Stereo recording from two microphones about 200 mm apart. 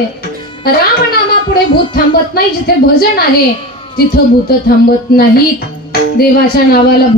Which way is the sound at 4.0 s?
50° left (ahead or behind).